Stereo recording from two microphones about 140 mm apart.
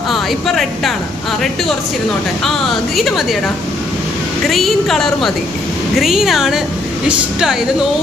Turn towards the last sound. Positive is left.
turn(degrees=-5)  # may be behind; listen again after turning